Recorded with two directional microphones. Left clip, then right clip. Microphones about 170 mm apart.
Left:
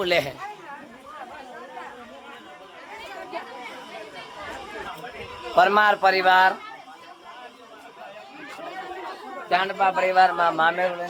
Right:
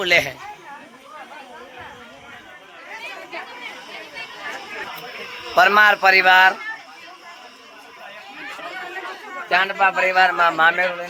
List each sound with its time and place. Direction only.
0.0 s a woman's voice: 5° left (ahead or behind)
5.5 s a man's voice: 10° right (ahead or behind)
9.5 s a man's voice: 15° right (ahead or behind)